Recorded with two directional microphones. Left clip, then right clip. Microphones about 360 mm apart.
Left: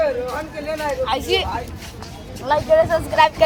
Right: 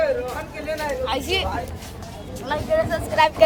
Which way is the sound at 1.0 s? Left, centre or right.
Centre.